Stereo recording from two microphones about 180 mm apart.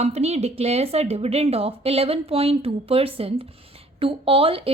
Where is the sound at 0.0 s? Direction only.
35° right (ahead or behind).